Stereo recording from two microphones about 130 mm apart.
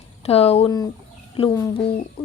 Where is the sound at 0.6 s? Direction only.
30° left (ahead or behind).